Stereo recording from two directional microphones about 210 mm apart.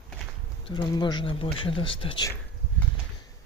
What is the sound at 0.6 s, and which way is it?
Speech, 20° left (ahead or behind).